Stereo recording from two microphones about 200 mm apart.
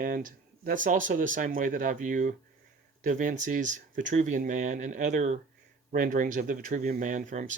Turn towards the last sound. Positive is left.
turn(degrees=-40)  # may be behind; listen again after turning